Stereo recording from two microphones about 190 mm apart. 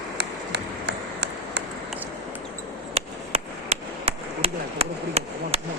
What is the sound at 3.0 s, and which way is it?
Chop, 35° right (ahead or behind).